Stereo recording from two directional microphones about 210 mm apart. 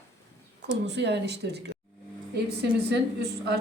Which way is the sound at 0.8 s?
55° right (ahead or behind).